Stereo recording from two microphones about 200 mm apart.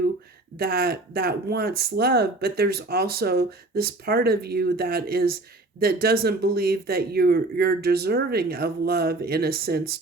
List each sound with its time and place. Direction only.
0.6 s speech: 50° right (ahead or behind)